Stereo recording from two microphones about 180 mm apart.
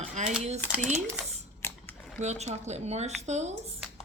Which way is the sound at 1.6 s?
5° left (ahead or behind).